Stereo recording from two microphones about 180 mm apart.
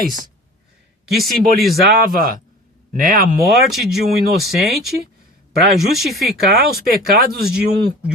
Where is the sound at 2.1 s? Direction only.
50° right (ahead or behind).